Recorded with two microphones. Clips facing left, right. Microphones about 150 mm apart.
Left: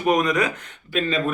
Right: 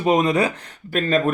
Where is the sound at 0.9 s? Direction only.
45° right (ahead or behind).